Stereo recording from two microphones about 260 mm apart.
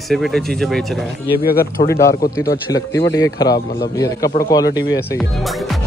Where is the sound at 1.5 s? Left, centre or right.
Left.